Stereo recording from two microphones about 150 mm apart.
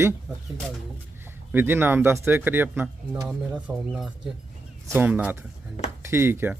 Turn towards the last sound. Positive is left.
turn(degrees=-15)  # may be behind; listen again after turning